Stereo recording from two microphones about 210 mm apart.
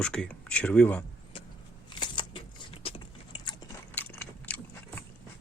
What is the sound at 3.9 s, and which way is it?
Biting, 10° left (ahead or behind).